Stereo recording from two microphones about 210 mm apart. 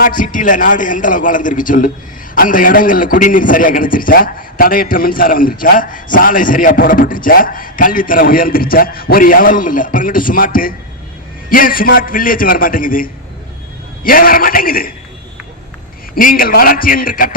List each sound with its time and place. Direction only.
0.0 s a man's voice: 40° left (ahead or behind)
16.1 s a man's voice: 45° left (ahead or behind)